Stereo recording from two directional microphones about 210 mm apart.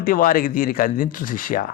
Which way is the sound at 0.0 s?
40° left (ahead or behind).